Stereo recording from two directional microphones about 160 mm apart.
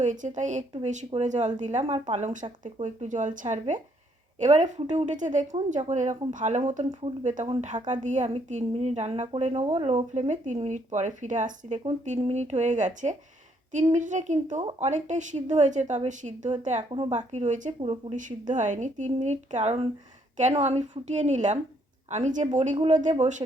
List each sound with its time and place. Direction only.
0.0 s a woman's voice: 50° right (ahead or behind)